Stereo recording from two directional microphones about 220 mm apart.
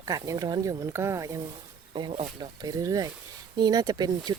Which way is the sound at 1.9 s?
25° right (ahead or behind).